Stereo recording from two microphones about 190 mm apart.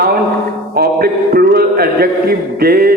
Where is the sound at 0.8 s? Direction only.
55° right (ahead or behind).